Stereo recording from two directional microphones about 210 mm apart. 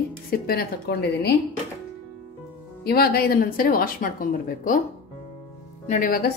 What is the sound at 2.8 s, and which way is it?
A woman's voice, 45° left (ahead or behind).